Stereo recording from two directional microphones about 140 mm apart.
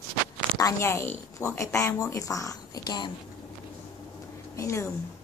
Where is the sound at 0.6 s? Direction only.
20° left (ahead or behind).